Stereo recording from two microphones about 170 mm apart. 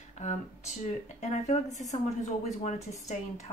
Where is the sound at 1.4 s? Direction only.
45° left (ahead or behind).